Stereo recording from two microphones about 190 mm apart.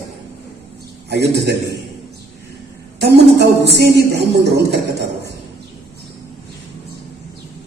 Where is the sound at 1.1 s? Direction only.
65° right (ahead or behind).